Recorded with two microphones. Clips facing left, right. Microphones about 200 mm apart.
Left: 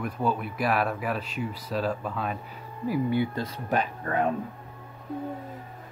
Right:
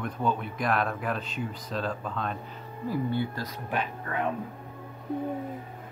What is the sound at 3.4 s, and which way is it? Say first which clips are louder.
Speech: left 4 dB; 35° left (ahead or behind).